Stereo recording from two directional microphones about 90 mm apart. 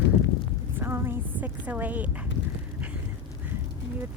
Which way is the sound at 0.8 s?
25° right (ahead or behind).